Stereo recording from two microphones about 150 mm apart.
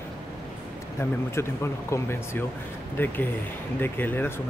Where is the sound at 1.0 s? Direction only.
15° left (ahead or behind).